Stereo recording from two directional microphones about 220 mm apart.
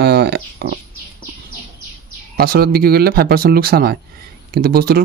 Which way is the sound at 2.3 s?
45° right (ahead or behind).